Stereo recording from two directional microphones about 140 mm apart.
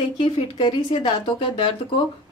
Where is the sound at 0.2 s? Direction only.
35° left (ahead or behind).